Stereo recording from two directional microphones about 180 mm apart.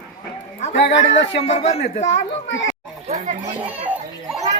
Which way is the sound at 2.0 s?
90° left.